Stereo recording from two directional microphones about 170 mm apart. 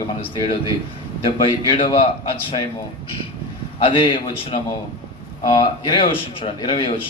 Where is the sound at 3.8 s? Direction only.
30° left (ahead or behind).